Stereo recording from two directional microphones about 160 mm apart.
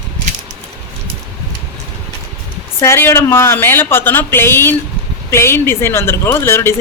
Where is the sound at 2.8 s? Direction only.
15° left (ahead or behind).